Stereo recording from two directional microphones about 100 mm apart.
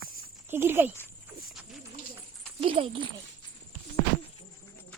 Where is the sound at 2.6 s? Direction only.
75° right (ahead or behind).